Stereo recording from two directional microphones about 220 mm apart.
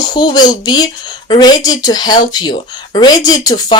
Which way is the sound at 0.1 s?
20° left (ahead or behind).